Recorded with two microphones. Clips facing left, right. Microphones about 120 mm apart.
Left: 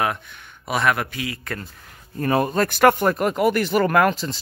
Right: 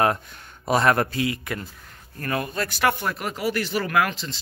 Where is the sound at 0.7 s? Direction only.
35° right (ahead or behind).